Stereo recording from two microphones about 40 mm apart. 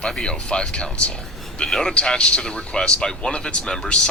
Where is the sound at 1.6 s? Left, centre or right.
Centre.